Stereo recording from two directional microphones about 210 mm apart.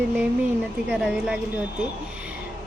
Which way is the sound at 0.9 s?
5° right (ahead or behind).